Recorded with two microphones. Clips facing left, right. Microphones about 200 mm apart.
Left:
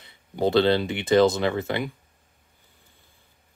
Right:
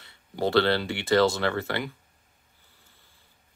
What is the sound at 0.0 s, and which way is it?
Speech, 20° left (ahead or behind).